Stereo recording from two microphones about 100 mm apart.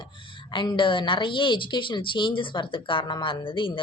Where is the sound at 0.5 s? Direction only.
50° left (ahead or behind).